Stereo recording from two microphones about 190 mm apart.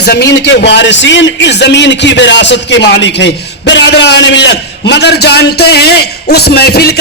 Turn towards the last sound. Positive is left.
turn(degrees=55)  # may be behind; listen again after turning